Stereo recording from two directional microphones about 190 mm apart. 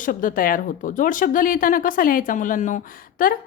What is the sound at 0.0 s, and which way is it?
Speech, 45° left (ahead or behind).